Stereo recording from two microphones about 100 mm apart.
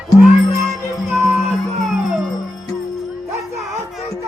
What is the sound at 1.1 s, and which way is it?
Music, centre (ahead or behind).